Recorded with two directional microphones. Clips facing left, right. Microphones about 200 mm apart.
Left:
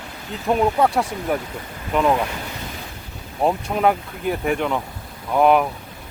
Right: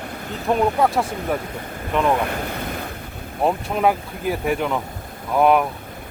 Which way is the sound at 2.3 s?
55° right (ahead or behind).